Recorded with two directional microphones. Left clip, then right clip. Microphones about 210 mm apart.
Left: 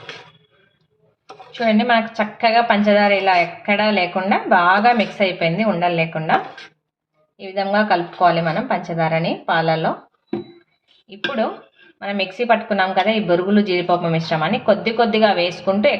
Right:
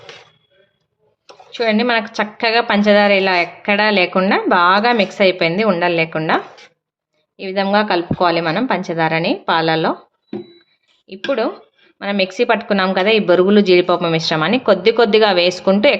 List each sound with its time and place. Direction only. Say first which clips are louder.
1.5 s a woman's voice: right 1 dB; 55° right (ahead or behind)
7.3 s a woman's voice: right 3 dB; 50° right (ahead or behind)
11.9 s a woman's voice: right 5 dB; 50° right (ahead or behind)